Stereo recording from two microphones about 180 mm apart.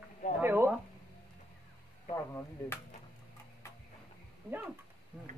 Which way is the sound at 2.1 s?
15° left (ahead or behind).